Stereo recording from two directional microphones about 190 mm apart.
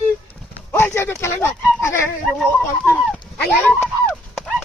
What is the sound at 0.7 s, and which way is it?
Speech, 15° left (ahead or behind).